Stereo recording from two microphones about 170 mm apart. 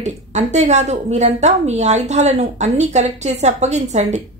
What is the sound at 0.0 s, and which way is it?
A woman's voice, 45° right (ahead or behind).